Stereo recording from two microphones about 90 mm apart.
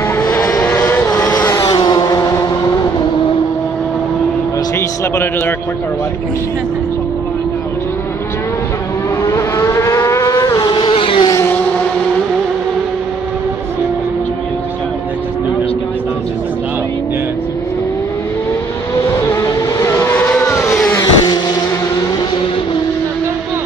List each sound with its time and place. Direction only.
0.4 s vehicle: 40° left (ahead or behind)
2.0 s vehicle: 40° left (ahead or behind)
4.7 s vehicle: 30° left (ahead or behind)
9.2 s vehicle: 35° left (ahead or behind); by 11.2 s 80° left
19.8 s vehicle: 30° left (ahead or behind)
20.2 s vehicle: 15° left (ahead or behind)
20.5 s vehicle: 30° left (ahead or behind)